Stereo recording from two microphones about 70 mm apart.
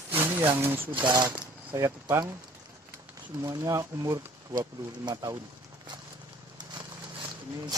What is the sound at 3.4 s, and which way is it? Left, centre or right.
Speech, right.